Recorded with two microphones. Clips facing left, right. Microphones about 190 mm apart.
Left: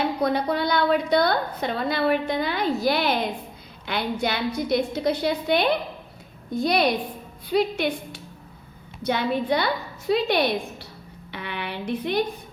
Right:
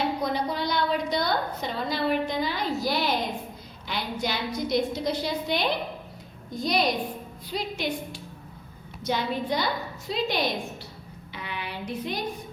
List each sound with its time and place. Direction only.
0.2 s a woman's voice: 60° left (ahead or behind)